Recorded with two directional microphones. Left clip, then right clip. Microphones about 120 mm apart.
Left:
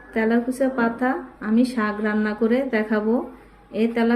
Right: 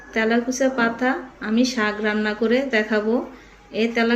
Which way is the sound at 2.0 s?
65° left (ahead or behind).